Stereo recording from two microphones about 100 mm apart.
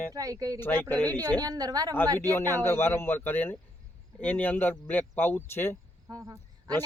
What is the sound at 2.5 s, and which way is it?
Speech, 25° left (ahead or behind).